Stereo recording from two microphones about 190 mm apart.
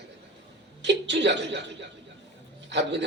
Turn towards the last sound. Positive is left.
turn(degrees=-70)  # may be behind; listen again after turning